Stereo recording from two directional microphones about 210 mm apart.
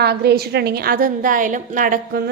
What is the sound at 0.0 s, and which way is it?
A woman's voice, 50° right (ahead or behind).